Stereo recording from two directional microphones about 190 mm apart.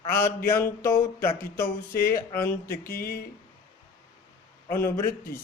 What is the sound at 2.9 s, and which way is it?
Speech, 55° left (ahead or behind).